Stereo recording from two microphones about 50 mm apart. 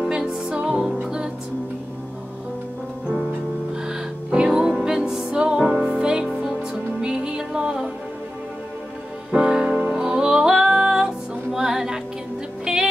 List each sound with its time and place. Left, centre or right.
0.0 s music: centre
3.8 s music: centre
9.3 s music: centre